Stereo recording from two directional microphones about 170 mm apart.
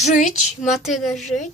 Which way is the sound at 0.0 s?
45° left (ahead or behind).